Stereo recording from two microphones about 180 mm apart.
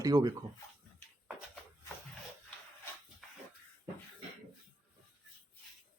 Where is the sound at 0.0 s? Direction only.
20° right (ahead or behind).